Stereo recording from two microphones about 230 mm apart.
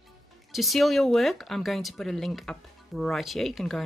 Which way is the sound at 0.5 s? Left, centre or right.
Centre.